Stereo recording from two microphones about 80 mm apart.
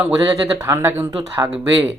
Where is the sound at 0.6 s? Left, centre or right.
Right.